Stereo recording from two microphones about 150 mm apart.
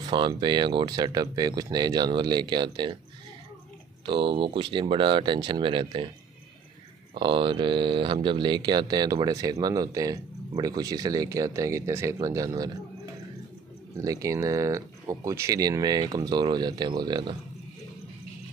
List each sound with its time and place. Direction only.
0.0 s speech: 30° right (ahead or behind)
4.0 s speech: 35° right (ahead or behind)
7.2 s speech: 30° right (ahead or behind)
13.9 s speech: 25° right (ahead or behind)